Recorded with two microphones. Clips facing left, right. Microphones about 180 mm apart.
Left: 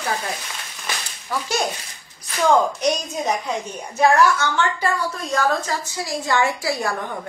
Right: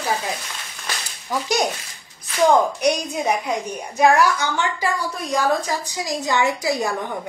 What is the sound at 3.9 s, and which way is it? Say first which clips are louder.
A woman's voice: even; 15° right (ahead or behind).